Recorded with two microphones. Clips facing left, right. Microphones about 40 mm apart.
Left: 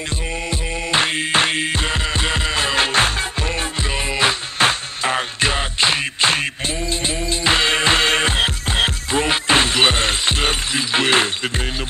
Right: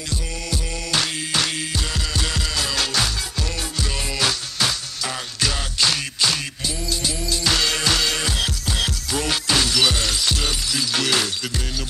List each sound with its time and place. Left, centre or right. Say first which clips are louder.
0.5 s music: left 3 dB; left